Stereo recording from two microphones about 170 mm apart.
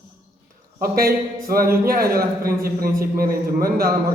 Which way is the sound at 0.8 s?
60° right (ahead or behind).